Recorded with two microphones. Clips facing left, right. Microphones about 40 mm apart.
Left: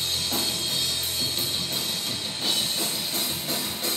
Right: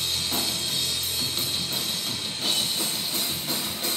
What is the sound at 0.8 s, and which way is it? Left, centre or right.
Music, centre.